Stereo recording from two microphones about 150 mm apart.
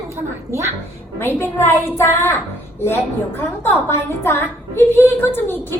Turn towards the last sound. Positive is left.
turn(degrees=15)  # may be behind; listen again after turning